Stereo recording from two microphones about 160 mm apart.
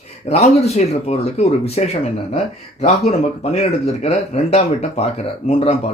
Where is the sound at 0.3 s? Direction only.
40° left (ahead or behind).